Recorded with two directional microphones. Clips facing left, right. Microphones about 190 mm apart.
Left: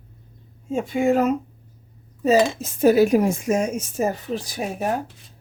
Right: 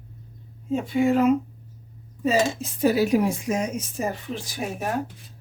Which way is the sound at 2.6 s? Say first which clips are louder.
Left 5 dB; 50° left (ahead or behind).